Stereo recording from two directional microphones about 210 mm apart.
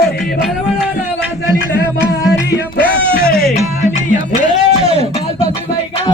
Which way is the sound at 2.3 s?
55° left (ahead or behind).